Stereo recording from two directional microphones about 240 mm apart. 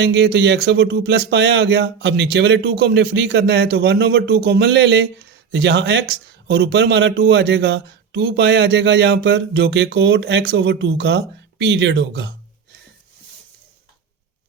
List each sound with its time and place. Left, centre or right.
0.0 s speech: right